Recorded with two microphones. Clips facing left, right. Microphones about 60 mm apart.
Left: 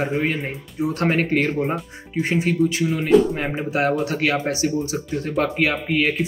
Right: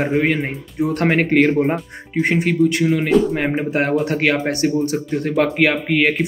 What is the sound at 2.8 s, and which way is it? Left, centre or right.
Speech, right.